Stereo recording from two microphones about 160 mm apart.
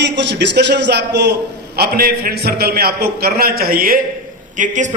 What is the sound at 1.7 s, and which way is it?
A man's voice, 75° right (ahead or behind).